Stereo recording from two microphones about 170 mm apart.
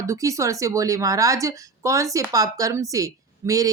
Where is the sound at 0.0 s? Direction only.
20° right (ahead or behind).